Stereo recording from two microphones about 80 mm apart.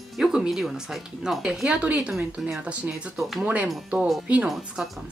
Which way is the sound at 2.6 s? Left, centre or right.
Centre.